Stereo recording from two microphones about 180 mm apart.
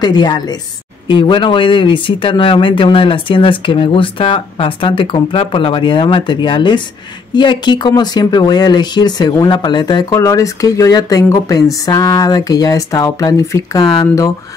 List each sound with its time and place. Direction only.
0.0 s speech: 25° left (ahead or behind)